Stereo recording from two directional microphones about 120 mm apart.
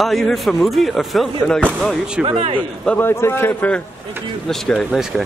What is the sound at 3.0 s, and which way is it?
Speech, 20° left (ahead or behind).